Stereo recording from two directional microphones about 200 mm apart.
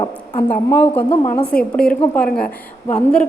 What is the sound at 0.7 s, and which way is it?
A woman's voice, 10° left (ahead or behind).